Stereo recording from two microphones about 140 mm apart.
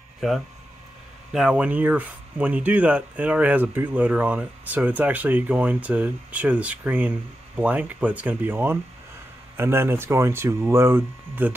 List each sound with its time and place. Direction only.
1.3 s speech: 5° right (ahead or behind)